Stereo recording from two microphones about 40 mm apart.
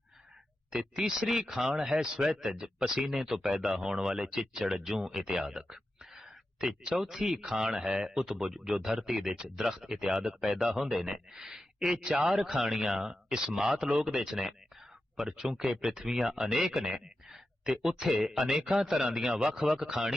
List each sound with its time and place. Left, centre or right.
0.7 s speech: centre
4.8 s a sound: centre
7.0 s speech: centre